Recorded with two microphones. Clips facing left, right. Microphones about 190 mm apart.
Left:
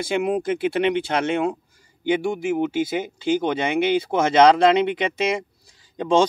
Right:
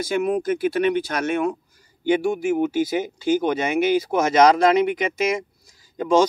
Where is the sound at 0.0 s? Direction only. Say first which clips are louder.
Even; 30° left (ahead or behind).